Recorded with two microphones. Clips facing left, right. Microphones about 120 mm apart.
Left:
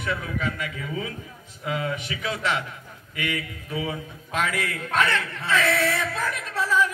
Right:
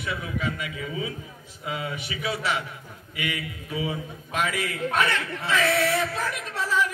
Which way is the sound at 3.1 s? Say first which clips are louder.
Left 2 dB; 40° left (ahead or behind).